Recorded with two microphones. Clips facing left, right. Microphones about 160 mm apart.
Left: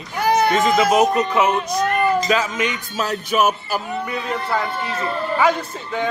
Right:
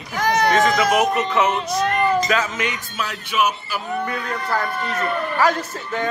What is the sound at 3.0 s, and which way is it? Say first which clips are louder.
Speech: left 4 dB; 40° left (ahead or behind).